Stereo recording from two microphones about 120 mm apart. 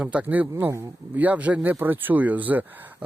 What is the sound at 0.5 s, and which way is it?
Speech, 25° right (ahead or behind).